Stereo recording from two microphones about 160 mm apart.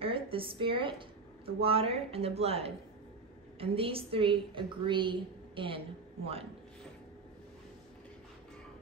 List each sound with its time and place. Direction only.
0.0 s a woman's voice: 35° right (ahead or behind)